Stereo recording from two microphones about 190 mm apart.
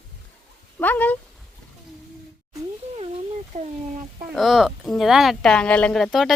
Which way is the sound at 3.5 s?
40° right (ahead or behind).